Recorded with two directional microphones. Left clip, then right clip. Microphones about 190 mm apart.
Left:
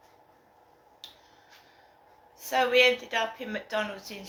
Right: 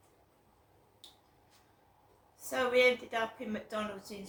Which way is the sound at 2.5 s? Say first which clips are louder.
Left 6 dB; 20° right (ahead or behind).